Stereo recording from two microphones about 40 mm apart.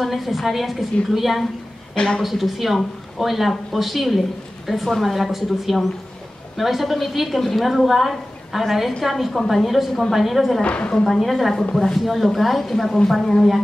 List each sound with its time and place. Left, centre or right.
0.0 s speech: centre
2.0 s a woman's voice: left
2.2 s speech: centre
10.6 s a woman's voice: left
11.1 s speech: centre